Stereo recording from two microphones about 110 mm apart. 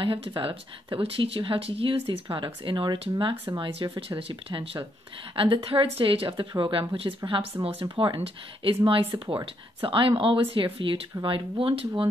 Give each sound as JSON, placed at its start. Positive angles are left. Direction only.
{"t": 0.0, "sound": "speech", "side_deg": -55}
{"t": 2.0, "sound": "speech", "side_deg": -45}